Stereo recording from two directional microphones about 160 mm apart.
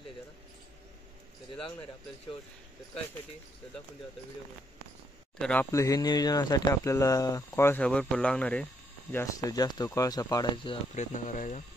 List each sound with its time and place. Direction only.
5.4 s speech: 10° left (ahead or behind)
5.7 s speech: 20° left (ahead or behind)
9.1 s speech: 20° left (ahead or behind)
11.0 s speech: 55° left (ahead or behind)